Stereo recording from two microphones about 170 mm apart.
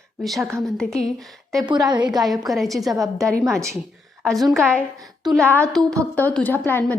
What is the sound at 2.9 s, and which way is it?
Speech, 20° right (ahead or behind).